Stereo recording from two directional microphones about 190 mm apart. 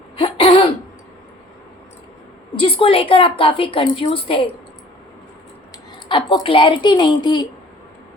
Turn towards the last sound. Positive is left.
turn(degrees=20)  # may be behind; listen again after turning